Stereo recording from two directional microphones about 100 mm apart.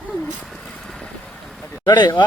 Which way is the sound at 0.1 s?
5° right (ahead or behind).